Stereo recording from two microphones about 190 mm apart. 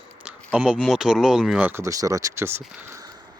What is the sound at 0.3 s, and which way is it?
Speech, 5° right (ahead or behind).